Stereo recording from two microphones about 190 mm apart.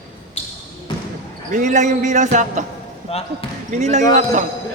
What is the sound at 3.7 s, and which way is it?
Speech, 40° right (ahead or behind).